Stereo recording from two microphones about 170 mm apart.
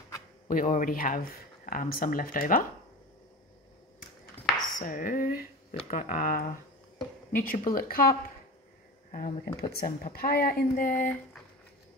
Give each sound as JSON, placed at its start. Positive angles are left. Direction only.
{"t": 0.5, "sound": "speech", "side_deg": 55}
{"t": 4.7, "sound": "a sound", "side_deg": 55}
{"t": 5.9, "sound": "speech", "side_deg": 50}